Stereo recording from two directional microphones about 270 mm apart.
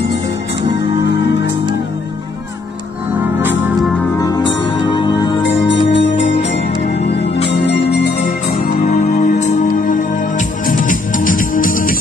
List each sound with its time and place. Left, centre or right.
3.1 s music: centre
4.2 s music: centre
5.4 s music: left
6.1 s music: left
7.4 s music: left
8.8 s music: left